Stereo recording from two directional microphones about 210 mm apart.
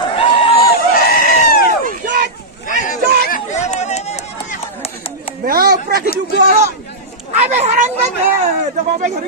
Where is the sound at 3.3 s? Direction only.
35° left (ahead or behind).